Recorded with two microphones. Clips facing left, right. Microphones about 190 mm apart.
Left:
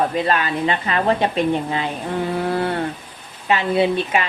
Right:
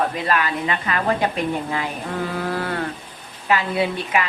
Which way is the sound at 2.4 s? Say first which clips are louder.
Left 4 dB; 25° left (ahead or behind).